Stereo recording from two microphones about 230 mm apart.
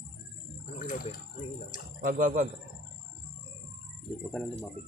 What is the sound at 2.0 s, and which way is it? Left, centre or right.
Speech, right.